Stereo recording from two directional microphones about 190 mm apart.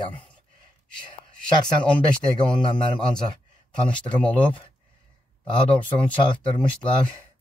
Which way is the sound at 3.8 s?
5° left (ahead or behind).